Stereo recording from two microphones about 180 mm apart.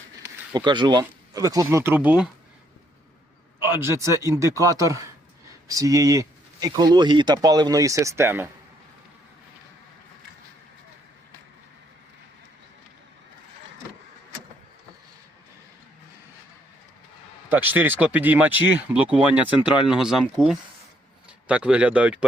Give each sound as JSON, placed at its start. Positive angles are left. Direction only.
{"t": 0.2, "sound": "speech", "side_deg": -25}
{"t": 3.6, "sound": "a man's voice", "side_deg": -15}
{"t": 17.5, "sound": "a man's voice", "side_deg": -10}